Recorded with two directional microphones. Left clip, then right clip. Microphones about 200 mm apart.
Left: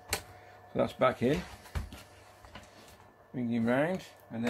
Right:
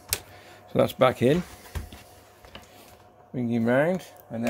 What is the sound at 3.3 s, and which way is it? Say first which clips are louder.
Speech: right 7 dB; 45° right (ahead or behind).